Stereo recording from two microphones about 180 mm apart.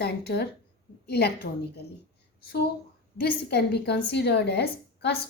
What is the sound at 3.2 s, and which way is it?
A woman's voice, 65° left (ahead or behind).